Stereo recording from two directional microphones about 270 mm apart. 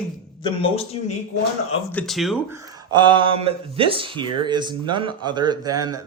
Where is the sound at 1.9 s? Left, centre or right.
Centre.